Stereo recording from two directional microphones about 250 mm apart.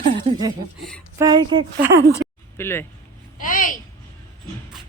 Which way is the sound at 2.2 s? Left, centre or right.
Right.